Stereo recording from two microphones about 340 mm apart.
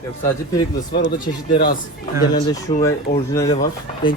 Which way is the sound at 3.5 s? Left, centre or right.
Left.